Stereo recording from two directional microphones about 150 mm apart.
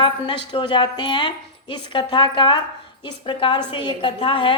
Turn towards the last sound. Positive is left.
turn(degrees=30)  # may be behind; listen again after turning